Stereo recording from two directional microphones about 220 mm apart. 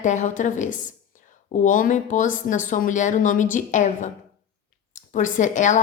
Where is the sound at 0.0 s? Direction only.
35° left (ahead or behind).